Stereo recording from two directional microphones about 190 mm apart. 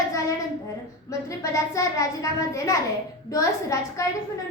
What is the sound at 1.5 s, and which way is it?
A woman's voice, 15° left (ahead or behind).